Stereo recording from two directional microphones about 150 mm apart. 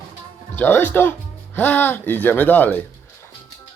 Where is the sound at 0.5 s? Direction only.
15° left (ahead or behind).